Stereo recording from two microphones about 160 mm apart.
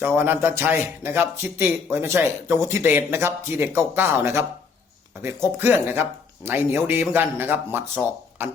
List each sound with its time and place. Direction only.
0.0 s a man's voice: 15° right (ahead or behind)